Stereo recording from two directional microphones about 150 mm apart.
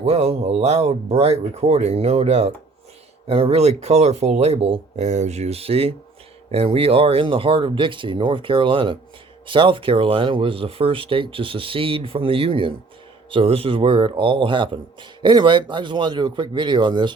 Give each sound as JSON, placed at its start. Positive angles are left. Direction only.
{"t": 0.0, "sound": "speech", "side_deg": -45}